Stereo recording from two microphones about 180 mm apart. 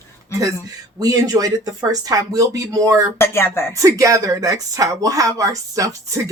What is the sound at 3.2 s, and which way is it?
Speech, 15° left (ahead or behind).